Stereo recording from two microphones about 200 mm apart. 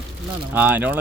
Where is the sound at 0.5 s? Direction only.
10° right (ahead or behind).